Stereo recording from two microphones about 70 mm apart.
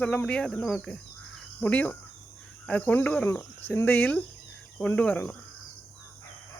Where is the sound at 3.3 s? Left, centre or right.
Left.